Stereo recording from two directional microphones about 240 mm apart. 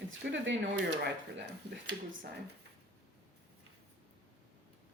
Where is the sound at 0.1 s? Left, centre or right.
Right.